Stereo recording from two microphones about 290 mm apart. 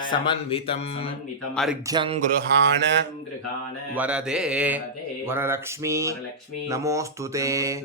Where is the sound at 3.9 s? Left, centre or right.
Centre.